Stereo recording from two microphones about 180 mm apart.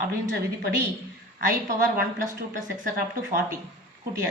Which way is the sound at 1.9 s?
45° right (ahead or behind).